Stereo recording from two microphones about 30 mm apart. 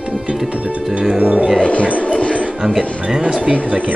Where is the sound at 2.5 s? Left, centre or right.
Right.